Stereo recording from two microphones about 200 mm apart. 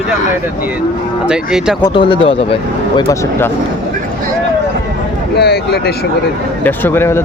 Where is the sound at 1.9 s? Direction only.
25° left (ahead or behind).